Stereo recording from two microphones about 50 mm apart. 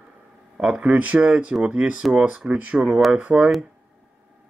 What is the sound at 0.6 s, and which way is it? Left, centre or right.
Speech, centre.